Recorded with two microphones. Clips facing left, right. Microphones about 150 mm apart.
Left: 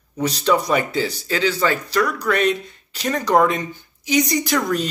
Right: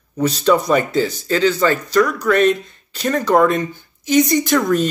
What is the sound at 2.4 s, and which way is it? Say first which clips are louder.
Speech: right 5 dB; 45° right (ahead or behind).